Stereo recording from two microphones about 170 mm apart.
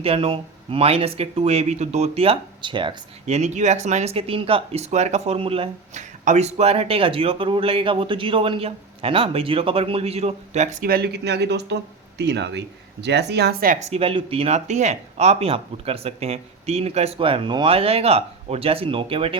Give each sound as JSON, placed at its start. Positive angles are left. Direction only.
{"t": 0.0, "sound": "speech", "side_deg": -35}
{"t": 13.7, "sound": "speech", "side_deg": -35}